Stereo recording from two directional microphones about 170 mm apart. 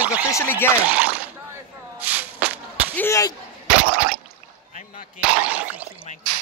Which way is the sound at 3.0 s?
15° left (ahead or behind).